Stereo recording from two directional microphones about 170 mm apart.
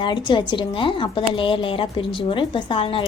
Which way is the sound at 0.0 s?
25° left (ahead or behind).